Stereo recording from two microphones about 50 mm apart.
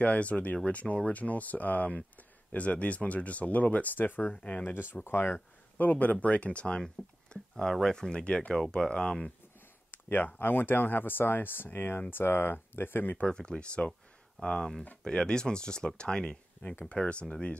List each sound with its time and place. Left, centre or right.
0.0 s speech: left
4.3 s speech: left
4.6 s speech: left
5.3 s speech: left; by 9.3 s centre
9.8 s speech: left
13.2 s speech: centre